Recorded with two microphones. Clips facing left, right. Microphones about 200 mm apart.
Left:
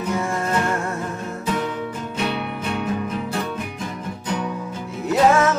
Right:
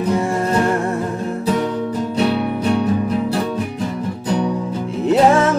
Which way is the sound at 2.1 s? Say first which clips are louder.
Right 7 dB; 35° right (ahead or behind).